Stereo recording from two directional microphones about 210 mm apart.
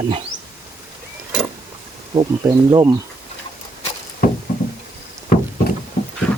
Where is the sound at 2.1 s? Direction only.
20° right (ahead or behind).